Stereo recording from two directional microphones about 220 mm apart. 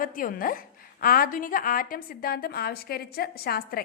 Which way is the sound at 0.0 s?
40° left (ahead or behind).